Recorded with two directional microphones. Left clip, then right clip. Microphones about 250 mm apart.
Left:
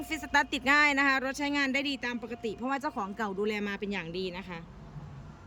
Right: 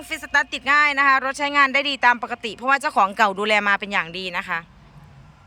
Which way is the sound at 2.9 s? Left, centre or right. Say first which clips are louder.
Right 17 dB; right.